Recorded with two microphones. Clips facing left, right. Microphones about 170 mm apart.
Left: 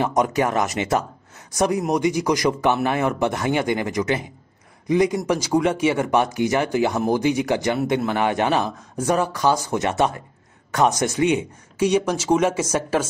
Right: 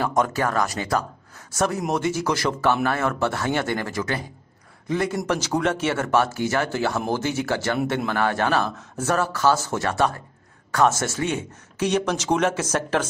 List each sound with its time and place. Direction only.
0.0 s speech: 20° left (ahead or behind)